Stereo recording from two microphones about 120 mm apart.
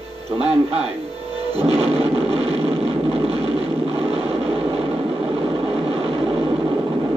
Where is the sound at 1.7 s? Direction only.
55° right (ahead or behind).